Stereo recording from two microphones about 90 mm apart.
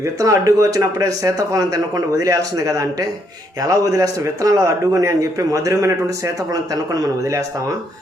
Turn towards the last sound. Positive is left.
turn(degrees=-35)  # may be behind; listen again after turning